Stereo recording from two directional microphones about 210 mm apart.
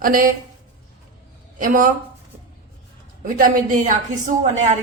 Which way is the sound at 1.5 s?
40° right (ahead or behind).